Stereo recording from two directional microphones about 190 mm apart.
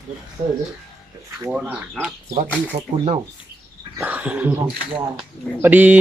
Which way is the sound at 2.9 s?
25° right (ahead or behind).